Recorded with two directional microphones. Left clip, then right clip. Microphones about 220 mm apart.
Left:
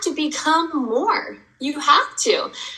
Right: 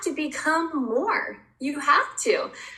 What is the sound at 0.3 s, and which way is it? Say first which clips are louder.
A woman's voice: left 5 dB; 15° right (ahead or behind).